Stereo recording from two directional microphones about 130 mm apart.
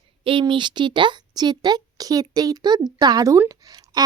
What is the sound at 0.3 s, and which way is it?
A woman's voice, 40° right (ahead or behind).